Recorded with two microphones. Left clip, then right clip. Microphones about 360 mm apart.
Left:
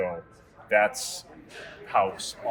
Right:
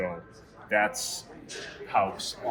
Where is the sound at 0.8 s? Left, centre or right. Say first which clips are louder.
Left 2 dB; centre.